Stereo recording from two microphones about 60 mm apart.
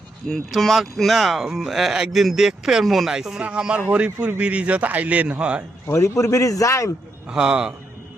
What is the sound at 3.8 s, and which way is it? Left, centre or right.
A man's voice, right.